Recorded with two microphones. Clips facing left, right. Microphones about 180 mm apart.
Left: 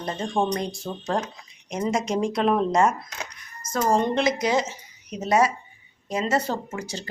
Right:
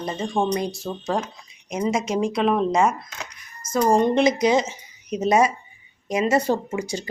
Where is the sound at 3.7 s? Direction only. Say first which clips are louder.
Right 4 dB; 15° right (ahead or behind).